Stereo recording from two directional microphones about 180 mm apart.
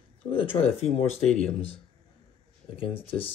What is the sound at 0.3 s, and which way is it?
Speech, 30° left (ahead or behind).